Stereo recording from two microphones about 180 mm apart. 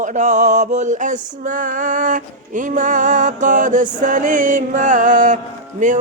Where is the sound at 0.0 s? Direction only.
40° right (ahead or behind).